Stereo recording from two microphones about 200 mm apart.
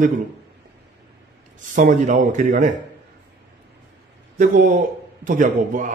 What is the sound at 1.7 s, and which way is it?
Speech, 40° right (ahead or behind).